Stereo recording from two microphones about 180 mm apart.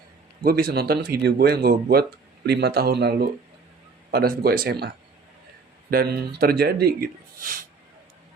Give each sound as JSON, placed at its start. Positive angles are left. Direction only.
{"t": 0.4, "sound": "speech", "side_deg": -55}
{"t": 5.9, "sound": "speech", "side_deg": -60}